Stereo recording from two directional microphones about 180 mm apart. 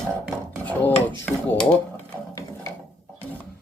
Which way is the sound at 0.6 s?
10° left (ahead or behind).